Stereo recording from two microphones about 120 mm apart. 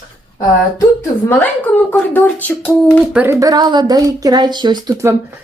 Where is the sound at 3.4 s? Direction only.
35° right (ahead or behind).